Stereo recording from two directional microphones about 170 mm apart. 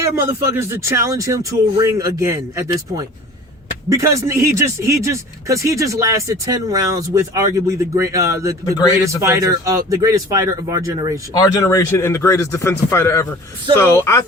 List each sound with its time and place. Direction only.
0.0 s speech: 15° right (ahead or behind)
11.3 s a man's voice: 20° left (ahead or behind)